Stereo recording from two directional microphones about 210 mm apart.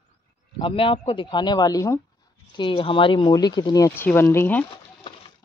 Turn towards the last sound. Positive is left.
turn(degrees=10)  # may be behind; listen again after turning